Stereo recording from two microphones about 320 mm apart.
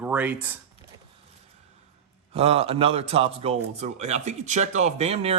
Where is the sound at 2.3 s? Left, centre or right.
Centre.